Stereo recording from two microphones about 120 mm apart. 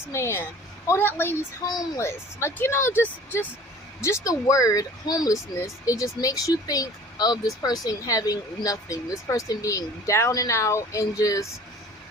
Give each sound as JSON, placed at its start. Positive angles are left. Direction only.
{"t": 0.1, "sound": "speech", "side_deg": 20}
{"t": 4.0, "sound": "speech", "side_deg": 25}